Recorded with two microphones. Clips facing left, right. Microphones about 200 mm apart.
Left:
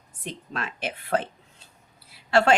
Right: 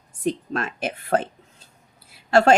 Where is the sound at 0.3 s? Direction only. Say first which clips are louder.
Right 9 dB; 45° right (ahead or behind).